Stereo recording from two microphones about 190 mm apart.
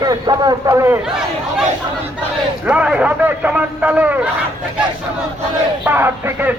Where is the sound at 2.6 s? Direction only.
5° right (ahead or behind).